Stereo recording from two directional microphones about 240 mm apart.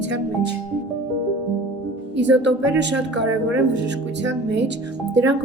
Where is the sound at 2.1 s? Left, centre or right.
Right.